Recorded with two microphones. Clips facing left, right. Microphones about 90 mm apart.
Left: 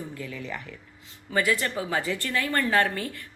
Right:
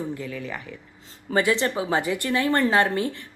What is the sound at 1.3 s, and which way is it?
A woman's voice, 25° right (ahead or behind).